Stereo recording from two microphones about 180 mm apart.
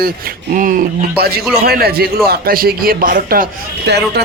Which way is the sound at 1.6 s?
60° right (ahead or behind).